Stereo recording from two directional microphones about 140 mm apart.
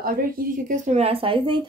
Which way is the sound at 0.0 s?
80° right.